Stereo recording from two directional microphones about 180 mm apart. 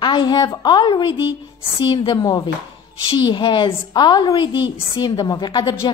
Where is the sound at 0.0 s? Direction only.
25° left (ahead or behind).